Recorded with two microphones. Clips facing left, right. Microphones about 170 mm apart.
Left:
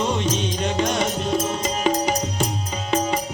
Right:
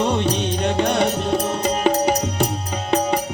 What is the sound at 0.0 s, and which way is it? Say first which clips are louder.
Music: right 3 dB; 65° right (ahead or behind).